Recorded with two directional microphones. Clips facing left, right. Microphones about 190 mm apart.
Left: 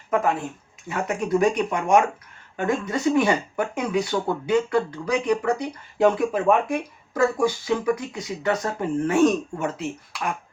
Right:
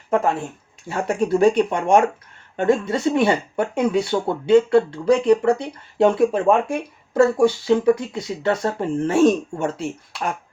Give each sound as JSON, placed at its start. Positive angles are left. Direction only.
{"t": 0.9, "sound": "speech", "side_deg": -30}